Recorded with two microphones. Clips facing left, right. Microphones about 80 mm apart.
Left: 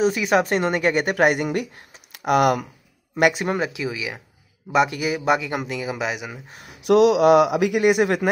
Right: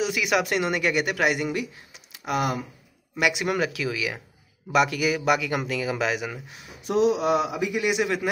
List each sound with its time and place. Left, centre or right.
0.0 s a woman's voice: left
3.2 s speech: left
3.4 s speech: left
6.8 s speech: left